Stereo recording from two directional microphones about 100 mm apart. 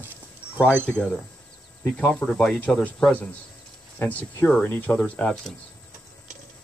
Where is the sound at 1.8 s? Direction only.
5° left (ahead or behind).